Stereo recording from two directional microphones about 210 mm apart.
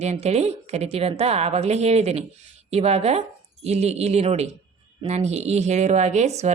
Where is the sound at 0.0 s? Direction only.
30° right (ahead or behind).